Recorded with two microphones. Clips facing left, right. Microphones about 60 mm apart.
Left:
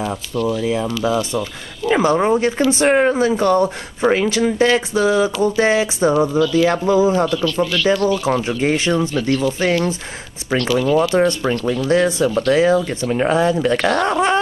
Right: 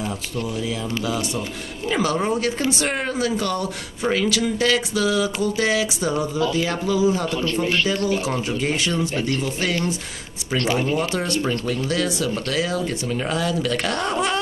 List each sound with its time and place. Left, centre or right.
0.5 s speech: left
10.6 s speech: right
11.1 s speech: left